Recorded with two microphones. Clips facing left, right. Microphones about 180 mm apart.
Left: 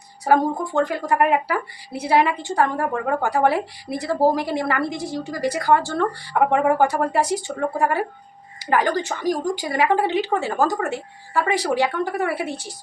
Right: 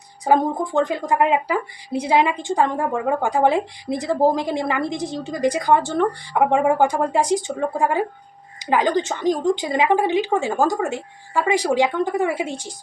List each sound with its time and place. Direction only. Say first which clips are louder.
0.3 s speech: even; 15° right (ahead or behind)